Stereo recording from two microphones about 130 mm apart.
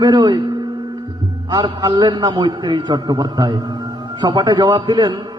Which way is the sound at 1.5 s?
35° right (ahead or behind).